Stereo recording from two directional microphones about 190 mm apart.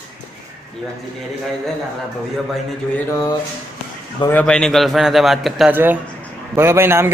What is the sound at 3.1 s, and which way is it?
Speech, 15° left (ahead or behind).